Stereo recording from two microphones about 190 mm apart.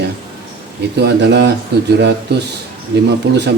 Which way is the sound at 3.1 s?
65° right (ahead or behind).